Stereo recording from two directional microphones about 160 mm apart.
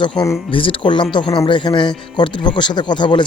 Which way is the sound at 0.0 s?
25° left (ahead or behind).